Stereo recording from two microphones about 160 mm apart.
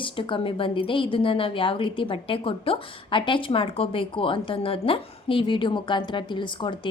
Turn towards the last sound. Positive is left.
turn(degrees=30)  # may be behind; listen again after turning